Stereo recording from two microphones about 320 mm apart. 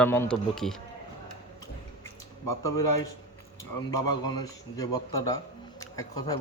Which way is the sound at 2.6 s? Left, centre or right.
Centre.